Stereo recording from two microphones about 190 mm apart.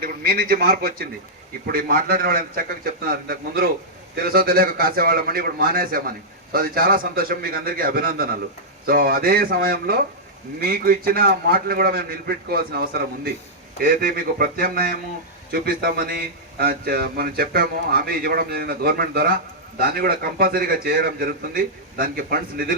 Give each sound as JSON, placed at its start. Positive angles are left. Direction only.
{"t": 0.0, "sound": "a man's voice", "side_deg": -55}